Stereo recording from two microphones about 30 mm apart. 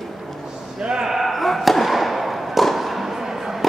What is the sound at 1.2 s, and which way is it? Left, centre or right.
Fireworks, centre.